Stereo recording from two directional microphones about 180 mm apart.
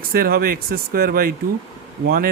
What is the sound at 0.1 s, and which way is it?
Speech, 55° right (ahead or behind).